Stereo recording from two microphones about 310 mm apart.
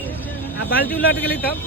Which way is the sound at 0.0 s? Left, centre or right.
Centre.